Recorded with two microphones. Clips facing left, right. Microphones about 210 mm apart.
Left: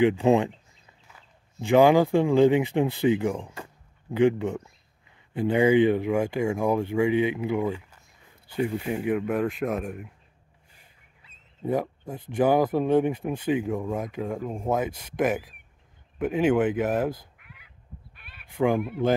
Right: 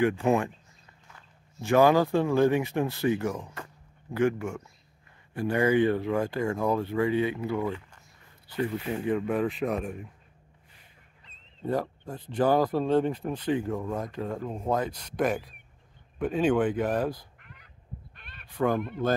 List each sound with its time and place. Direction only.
0.0 s speech: 20° left (ahead or behind); by 9.9 s centre (ahead or behind)
11.2 s speech: 10° left (ahead or behind)
18.1 s fowl: 5° left (ahead or behind)